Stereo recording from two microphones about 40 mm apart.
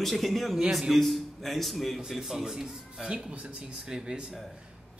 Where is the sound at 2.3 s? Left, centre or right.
Centre.